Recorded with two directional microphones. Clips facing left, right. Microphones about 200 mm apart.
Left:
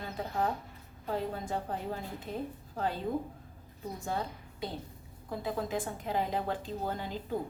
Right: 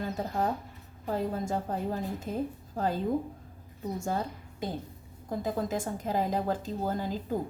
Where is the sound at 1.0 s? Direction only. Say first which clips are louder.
Right 4 dB; 40° right (ahead or behind).